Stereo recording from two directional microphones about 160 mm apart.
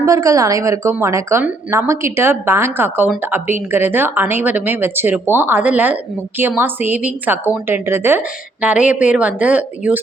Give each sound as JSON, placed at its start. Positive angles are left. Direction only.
{"t": 0.0, "sound": "a woman's voice", "side_deg": -20}